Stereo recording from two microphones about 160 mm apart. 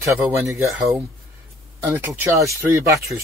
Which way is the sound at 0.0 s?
15° right (ahead or behind).